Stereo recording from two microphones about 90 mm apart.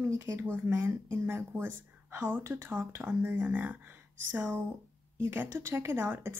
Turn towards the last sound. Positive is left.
turn(degrees=-25)  # may be behind; listen again after turning